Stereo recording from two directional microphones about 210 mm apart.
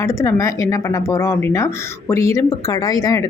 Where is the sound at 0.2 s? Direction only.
15° left (ahead or behind).